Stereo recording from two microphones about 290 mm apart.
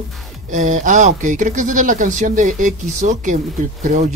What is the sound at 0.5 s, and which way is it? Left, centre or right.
Speech, right.